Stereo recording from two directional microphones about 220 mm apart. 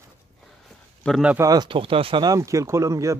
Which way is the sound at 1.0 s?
Centre (ahead or behind).